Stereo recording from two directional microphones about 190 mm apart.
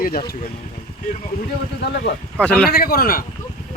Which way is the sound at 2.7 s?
50° left (ahead or behind).